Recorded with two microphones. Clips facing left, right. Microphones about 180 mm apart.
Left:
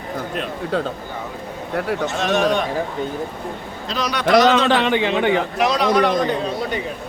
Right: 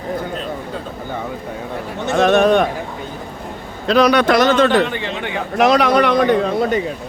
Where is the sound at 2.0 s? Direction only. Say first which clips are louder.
Right 9 dB; 60° right (ahead or behind).